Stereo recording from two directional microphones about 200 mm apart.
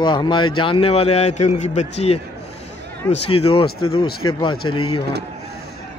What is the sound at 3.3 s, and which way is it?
Speech, 90° left.